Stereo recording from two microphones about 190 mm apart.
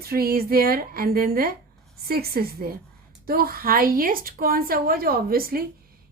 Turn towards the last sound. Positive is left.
turn(degrees=-50)  # may be behind; listen again after turning